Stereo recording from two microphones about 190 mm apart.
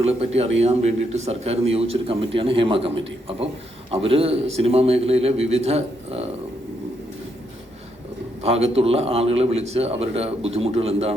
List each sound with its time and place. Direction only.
0.0 s a man's voice: 35° right (ahead or behind)
8.4 s a man's voice: 35° right (ahead or behind)